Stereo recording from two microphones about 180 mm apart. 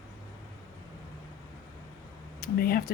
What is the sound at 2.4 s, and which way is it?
Speech, 55° left (ahead or behind).